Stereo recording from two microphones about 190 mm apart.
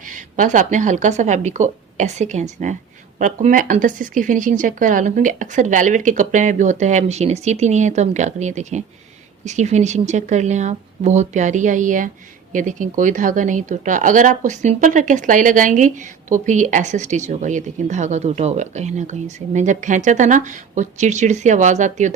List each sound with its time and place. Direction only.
0.1 s a woman's voice: 45° right (ahead or behind)